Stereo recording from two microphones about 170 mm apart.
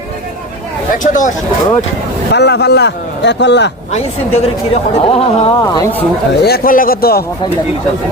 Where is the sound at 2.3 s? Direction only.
80° left.